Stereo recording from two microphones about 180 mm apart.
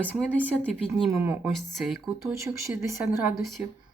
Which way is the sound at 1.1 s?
15° right (ahead or behind).